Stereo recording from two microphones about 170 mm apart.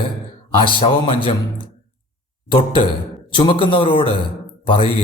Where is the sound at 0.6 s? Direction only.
30° left (ahead or behind).